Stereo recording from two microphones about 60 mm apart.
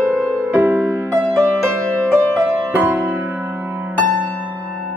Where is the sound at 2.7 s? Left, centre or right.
Right.